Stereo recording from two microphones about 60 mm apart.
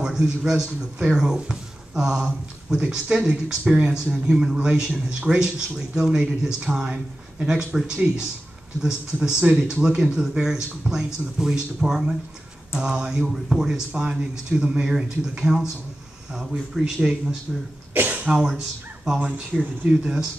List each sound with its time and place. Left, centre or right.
0.0 s speech: centre
19.9 s speech: centre